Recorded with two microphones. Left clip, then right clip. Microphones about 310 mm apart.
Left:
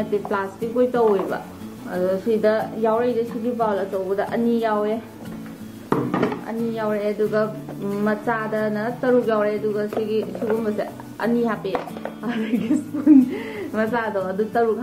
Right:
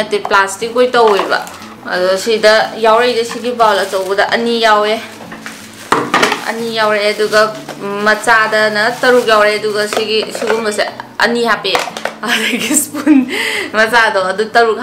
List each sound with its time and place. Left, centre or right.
0.2 s a woman's voice: centre
5.9 s a sound: centre
8.0 s a woman's voice: centre